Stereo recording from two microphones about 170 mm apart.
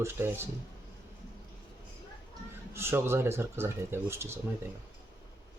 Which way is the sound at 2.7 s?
15° right (ahead or behind).